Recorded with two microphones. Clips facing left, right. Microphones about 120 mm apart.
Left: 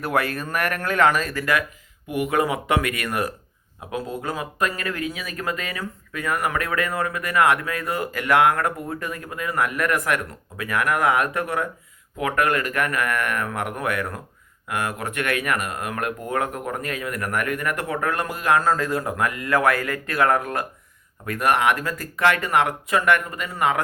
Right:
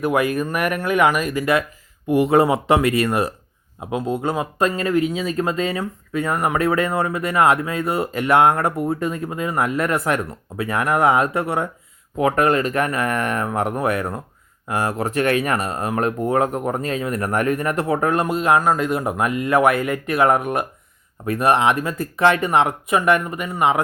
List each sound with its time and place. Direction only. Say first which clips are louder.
0.0 s speech: right 5 dB; 15° right (ahead or behind)